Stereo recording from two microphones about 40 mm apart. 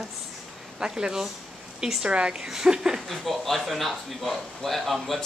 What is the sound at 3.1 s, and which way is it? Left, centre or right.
Speech, centre.